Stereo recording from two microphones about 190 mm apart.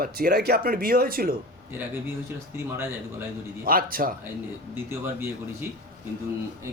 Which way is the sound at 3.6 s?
50° right (ahead or behind).